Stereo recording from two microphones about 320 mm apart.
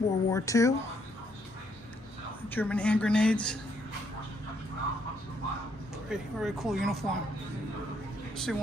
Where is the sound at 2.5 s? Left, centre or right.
Centre.